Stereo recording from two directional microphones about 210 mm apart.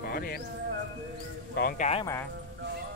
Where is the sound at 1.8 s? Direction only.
30° left (ahead or behind).